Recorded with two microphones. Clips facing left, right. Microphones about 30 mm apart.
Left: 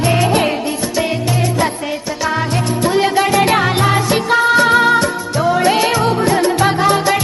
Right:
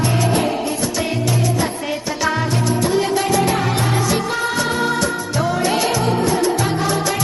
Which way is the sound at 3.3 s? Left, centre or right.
Left.